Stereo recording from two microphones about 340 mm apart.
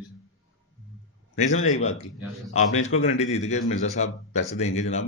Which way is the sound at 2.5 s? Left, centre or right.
Centre.